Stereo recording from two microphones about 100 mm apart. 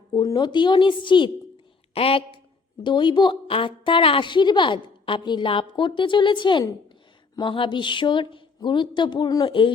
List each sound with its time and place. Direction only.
0.1 s a woman's voice: 40° left (ahead or behind)
1.9 s speech: 70° left (ahead or behind)
2.8 s a woman's voice: 50° left (ahead or behind)